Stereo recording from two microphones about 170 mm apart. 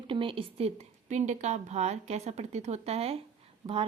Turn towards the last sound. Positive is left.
turn(degrees=-20)  # may be behind; listen again after turning